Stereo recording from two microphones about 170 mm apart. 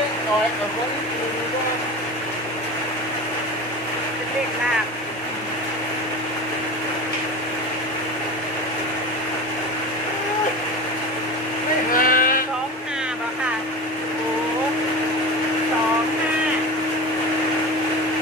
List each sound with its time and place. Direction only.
11.9 s vehicle: 55° left (ahead or behind)